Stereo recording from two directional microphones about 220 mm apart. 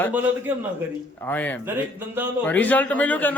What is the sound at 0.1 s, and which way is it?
Speech, 10° right (ahead or behind).